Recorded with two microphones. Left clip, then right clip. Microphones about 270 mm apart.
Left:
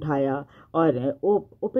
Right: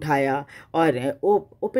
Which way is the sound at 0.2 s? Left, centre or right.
Right.